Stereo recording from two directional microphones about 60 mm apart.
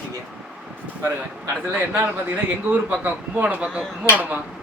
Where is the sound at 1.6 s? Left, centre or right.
Right.